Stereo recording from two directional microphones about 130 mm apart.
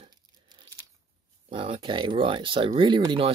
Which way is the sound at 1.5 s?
45° right (ahead or behind).